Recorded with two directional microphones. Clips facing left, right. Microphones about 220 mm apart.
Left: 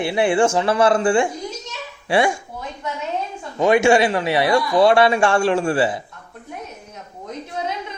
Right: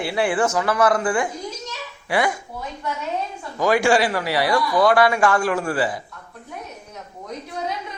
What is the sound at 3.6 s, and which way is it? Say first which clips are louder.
A man's voice: left 3 dB; 25° left (ahead or behind).